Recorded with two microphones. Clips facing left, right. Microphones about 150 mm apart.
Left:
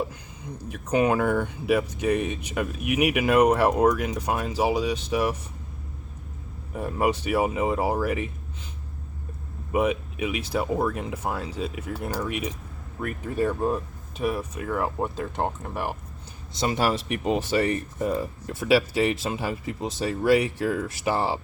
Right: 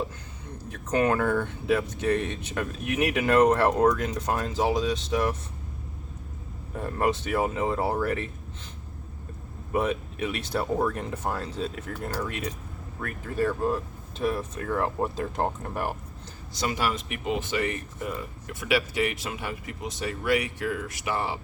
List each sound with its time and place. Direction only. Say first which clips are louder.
0.4 s speech: left 3 dB; 15° left (ahead or behind)
6.7 s speech: left 2 dB; 10° left (ahead or behind)
9.7 s speech: left 3 dB; 10° left (ahead or behind)
14.3 s speech: left 1 dB; 10° left (ahead or behind)
16.6 s speech: left 4 dB; 30° left (ahead or behind)